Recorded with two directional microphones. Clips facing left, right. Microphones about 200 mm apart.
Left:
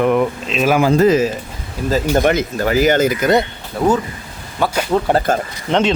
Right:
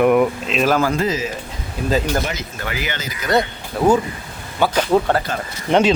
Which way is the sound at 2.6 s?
40° left (ahead or behind).